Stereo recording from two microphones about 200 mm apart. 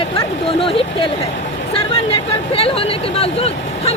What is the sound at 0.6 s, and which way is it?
Speech, 25° left (ahead or behind).